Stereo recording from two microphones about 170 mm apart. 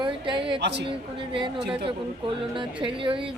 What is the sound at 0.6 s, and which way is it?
Speech, 90° right.